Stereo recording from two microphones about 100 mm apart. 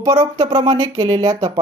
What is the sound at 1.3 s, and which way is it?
Speech, 40° right (ahead or behind).